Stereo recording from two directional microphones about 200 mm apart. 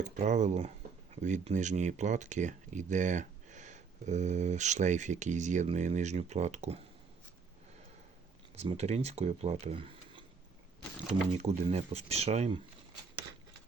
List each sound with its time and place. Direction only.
0.0 s speech: 35° right (ahead or behind)
8.5 s speech: 30° right (ahead or behind)
11.3 s speech: 30° right (ahead or behind)